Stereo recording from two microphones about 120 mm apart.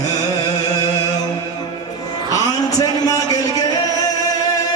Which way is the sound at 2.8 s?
30° left (ahead or behind).